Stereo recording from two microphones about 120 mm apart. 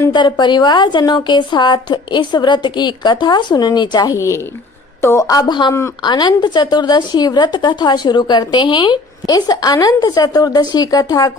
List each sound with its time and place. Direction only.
0.1 s speech: 40° left (ahead or behind)